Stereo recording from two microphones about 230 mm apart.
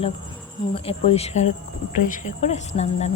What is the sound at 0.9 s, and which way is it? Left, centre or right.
Speech, left.